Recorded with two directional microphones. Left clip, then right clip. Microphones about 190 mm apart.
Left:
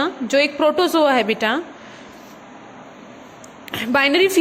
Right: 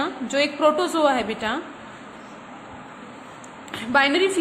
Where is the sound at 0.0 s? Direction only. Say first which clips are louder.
Left 5 dB; 30° left (ahead or behind).